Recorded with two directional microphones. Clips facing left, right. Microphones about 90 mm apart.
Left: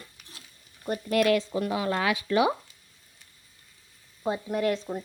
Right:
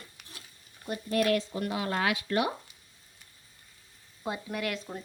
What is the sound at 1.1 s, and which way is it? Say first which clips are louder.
Speech: left 4 dB; 85° left.